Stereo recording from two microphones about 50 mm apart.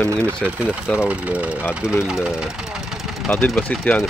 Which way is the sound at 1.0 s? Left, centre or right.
Right.